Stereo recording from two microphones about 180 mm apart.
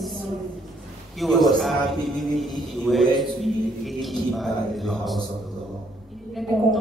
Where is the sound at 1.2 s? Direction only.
Centre (ahead or behind).